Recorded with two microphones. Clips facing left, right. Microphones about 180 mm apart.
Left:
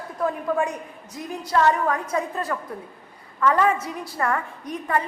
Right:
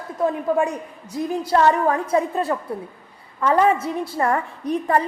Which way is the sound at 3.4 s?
25° right (ahead or behind).